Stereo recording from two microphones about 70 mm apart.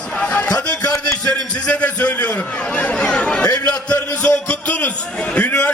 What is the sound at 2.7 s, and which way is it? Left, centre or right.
Chatter, centre.